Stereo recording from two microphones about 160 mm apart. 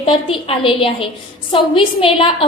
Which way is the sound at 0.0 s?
35° left (ahead or behind).